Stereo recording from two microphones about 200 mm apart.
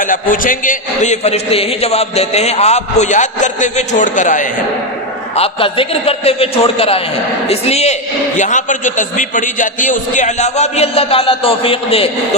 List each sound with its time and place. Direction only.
0.0 s a man's voice: 40° left (ahead or behind)
5.4 s a man's voice: 25° left (ahead or behind)